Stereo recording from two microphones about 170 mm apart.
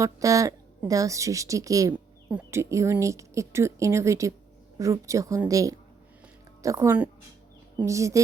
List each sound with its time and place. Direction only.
0.0 s a woman's voice: 20° right (ahead or behind)